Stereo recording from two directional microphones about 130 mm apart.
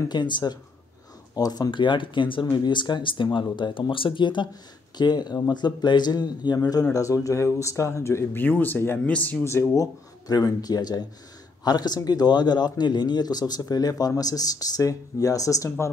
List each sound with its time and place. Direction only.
0.1 s speech: 35° left (ahead or behind)